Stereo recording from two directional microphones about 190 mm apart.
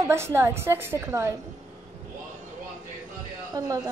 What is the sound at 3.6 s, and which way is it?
Speech, 20° right (ahead or behind).